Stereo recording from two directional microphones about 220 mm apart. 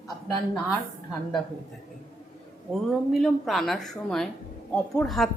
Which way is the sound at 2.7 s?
Centre (ahead or behind).